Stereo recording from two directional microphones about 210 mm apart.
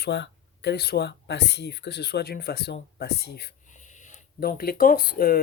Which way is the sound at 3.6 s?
35° left (ahead or behind).